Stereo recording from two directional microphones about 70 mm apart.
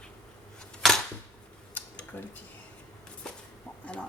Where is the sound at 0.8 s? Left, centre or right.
Centre.